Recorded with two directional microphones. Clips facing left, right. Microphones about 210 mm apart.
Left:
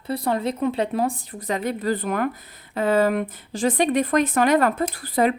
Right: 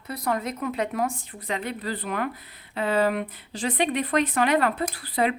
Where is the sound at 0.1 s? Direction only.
30° left (ahead or behind).